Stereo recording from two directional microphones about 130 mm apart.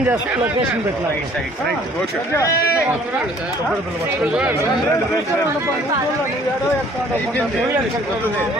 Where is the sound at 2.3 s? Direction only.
20° left (ahead or behind).